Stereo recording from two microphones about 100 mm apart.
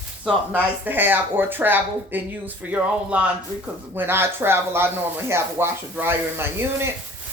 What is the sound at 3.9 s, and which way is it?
Speech, 25° right (ahead or behind).